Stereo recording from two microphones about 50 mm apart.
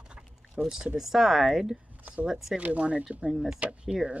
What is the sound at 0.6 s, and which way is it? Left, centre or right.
Speech, centre.